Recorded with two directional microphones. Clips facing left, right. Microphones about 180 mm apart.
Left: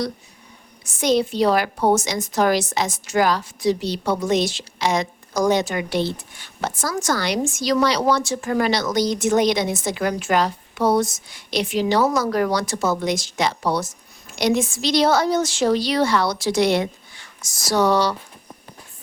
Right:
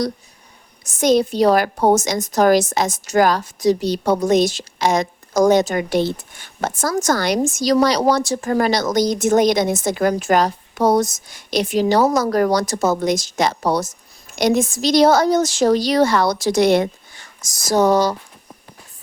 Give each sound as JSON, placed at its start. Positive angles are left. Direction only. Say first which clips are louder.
{"t": 0.9, "sound": "a woman's voice", "louder": "right 4 dB", "side_deg": -45}